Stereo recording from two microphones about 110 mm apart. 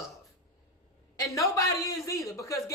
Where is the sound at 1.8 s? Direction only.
30° left (ahead or behind).